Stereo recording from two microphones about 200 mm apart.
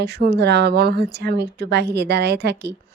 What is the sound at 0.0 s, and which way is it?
A woman's voice, 55° right (ahead or behind).